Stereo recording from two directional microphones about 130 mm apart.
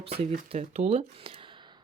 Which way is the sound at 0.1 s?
55° right (ahead or behind).